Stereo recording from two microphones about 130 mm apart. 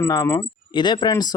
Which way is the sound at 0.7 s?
35° left (ahead or behind).